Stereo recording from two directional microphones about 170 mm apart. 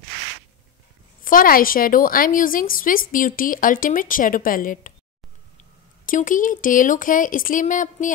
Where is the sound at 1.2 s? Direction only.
55° left (ahead or behind).